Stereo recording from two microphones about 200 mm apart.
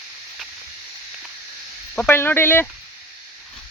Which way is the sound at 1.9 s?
10° left (ahead or behind).